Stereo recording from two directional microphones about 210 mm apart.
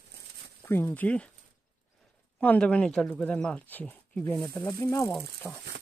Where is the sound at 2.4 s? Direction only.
5° left (ahead or behind).